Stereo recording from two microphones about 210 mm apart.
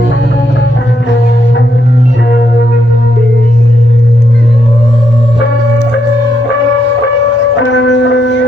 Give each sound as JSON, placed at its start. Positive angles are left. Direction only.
{"t": 7.5, "sound": "music", "side_deg": 60}